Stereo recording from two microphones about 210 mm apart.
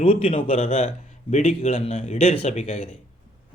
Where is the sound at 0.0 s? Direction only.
25° left (ahead or behind).